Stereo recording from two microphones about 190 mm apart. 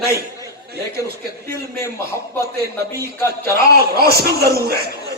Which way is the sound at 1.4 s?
55° right (ahead or behind).